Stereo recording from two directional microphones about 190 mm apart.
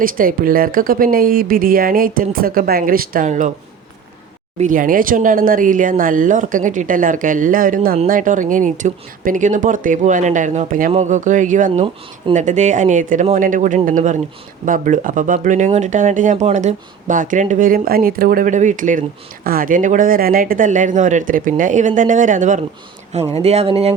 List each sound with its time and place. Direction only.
0.0 s speech: 50° right (ahead or behind)
4.5 s speech: 45° right (ahead or behind)